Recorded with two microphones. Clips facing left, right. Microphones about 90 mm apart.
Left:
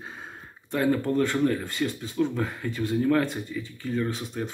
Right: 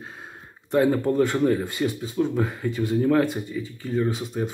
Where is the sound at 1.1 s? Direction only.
5° right (ahead or behind).